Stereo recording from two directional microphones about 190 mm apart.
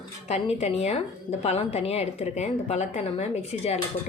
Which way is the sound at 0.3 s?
35° left (ahead or behind).